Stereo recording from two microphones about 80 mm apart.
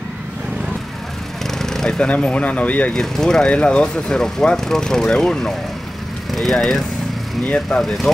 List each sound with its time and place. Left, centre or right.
1.5 s speech: centre
2.9 s speech: centre
6.5 s speech: centre